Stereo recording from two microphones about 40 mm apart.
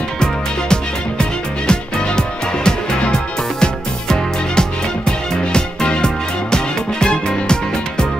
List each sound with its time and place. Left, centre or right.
0.2 s music: left